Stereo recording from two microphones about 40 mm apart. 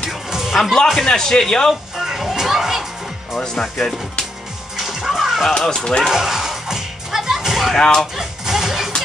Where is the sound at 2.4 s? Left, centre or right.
Centre.